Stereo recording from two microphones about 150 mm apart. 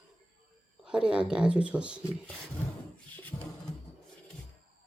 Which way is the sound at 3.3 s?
15° left (ahead or behind).